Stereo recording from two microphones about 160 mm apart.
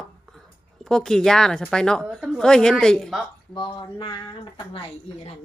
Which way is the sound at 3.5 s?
30° left (ahead or behind).